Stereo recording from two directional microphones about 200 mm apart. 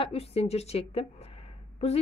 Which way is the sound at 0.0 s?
30° left (ahead or behind).